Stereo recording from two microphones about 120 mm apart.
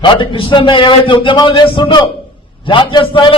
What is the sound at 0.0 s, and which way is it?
A man's voice, 45° left (ahead or behind).